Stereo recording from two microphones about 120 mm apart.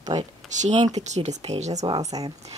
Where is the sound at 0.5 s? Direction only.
80° right.